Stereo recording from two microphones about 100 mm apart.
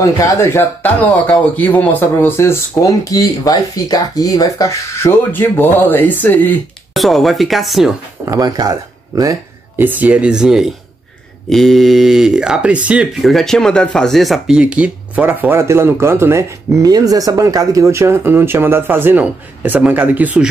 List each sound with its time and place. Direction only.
0.0 s speech: 30° left (ahead or behind)
1.2 s speech: 10° left (ahead or behind); by 5.1 s 35° left (ahead or behind)
5.3 s speech: 20° left (ahead or behind)
6.9 s speech: centre (ahead or behind)
8.3 s speech: 40° right (ahead or behind)
9.8 s speech: 15° right (ahead or behind); by 14.6 s centre (ahead or behind)
14.6 s speech: 10° right (ahead or behind)
16.8 s speech: 40° right (ahead or behind); by 20.4 s 15° right (ahead or behind)